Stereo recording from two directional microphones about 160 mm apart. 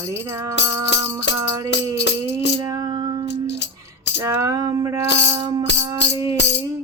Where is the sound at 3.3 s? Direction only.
90° left.